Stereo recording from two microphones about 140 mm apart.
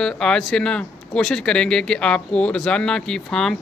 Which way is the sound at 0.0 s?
5° left (ahead or behind).